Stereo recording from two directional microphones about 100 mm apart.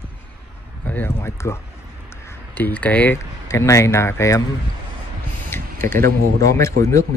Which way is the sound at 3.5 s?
30° left (ahead or behind).